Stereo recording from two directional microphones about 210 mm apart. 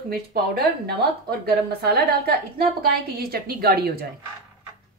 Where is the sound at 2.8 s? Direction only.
45° right (ahead or behind).